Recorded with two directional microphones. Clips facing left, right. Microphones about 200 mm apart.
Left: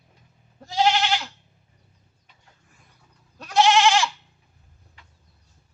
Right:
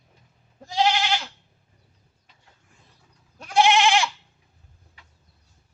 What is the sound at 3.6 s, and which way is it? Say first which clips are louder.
Goat: left 2 dB; 15° right (ahead or behind).